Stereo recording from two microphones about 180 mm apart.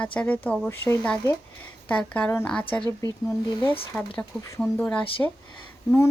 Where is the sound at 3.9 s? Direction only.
10° left (ahead or behind).